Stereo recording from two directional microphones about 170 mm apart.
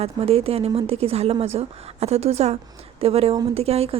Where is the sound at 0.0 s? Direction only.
35° right (ahead or behind).